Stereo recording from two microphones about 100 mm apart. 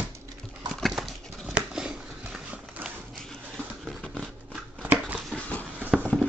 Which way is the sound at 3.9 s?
Centre (ahead or behind).